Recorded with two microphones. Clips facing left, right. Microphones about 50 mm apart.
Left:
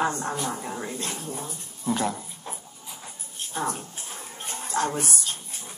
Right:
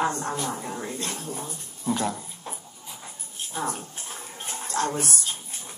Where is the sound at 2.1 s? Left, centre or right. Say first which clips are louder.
Even; centre.